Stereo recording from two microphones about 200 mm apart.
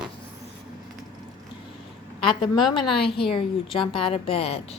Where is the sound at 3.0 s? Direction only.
25° left (ahead or behind).